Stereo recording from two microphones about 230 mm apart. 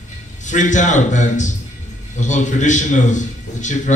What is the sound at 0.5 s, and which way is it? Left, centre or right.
A man's voice, left.